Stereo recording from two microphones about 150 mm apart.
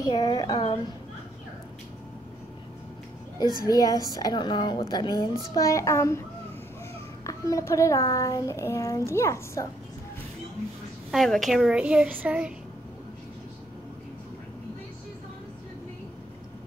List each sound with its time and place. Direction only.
0.0 s a woman's voice: 25° left (ahead or behind)
3.6 s a woman's voice: 25° left (ahead or behind)
7.2 s a woman's voice: 20° left (ahead or behind)
11.1 s a child's voice: centre (ahead or behind)